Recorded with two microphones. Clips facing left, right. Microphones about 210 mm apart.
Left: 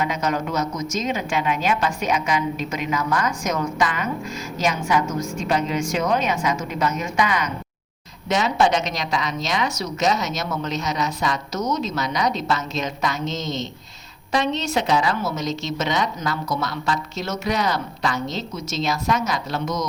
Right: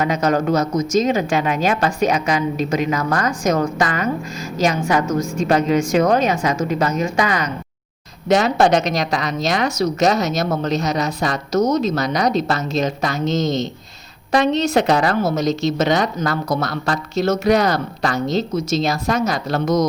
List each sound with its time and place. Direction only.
0.0 s a woman's voice: 40° right (ahead or behind)
14.7 s a woman's voice: 65° right (ahead or behind)
15.2 s speech: 40° right (ahead or behind)